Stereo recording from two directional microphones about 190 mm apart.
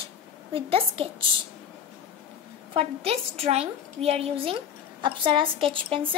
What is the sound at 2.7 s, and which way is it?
A woman's voice, 30° right (ahead or behind).